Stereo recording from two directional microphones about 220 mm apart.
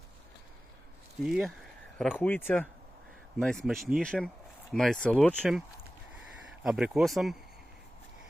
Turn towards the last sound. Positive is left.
turn(degrees=0)  # may be behind; listen again after turning